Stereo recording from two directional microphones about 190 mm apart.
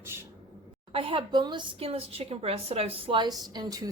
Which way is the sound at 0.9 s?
30° right (ahead or behind).